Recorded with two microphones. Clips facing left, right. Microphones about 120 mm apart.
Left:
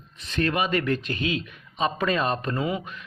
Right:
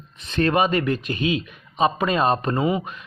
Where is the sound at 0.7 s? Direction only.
15° right (ahead or behind).